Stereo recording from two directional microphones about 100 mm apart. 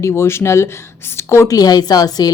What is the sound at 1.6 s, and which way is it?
Speech, 40° left (ahead or behind).